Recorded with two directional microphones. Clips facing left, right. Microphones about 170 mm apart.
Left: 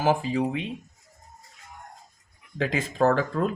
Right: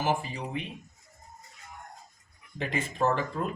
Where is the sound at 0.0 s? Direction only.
90° left.